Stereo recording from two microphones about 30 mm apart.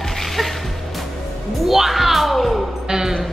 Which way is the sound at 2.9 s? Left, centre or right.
Centre.